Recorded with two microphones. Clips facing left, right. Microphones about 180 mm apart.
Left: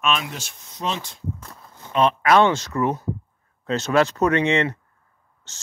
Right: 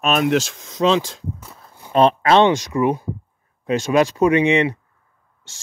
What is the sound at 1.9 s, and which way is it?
Speech, 30° right (ahead or behind).